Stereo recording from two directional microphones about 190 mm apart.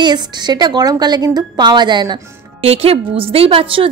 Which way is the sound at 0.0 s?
20° right (ahead or behind).